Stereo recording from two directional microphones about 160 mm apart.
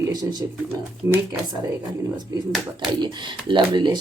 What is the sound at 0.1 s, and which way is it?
Speech, 25° right (ahead or behind).